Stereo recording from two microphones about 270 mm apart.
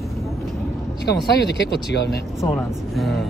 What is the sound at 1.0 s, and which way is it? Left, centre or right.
Speech, left.